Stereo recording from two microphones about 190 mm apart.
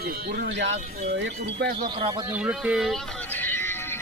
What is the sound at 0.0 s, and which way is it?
Speech, 55° right (ahead or behind).